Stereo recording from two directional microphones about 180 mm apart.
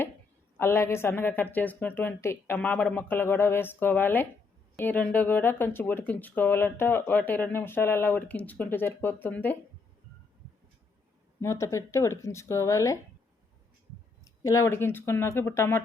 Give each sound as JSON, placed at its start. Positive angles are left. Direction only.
{"t": 0.5, "sound": "speech", "side_deg": 15}
{"t": 11.3, "sound": "speech", "side_deg": 15}
{"t": 14.4, "sound": "speech", "side_deg": 15}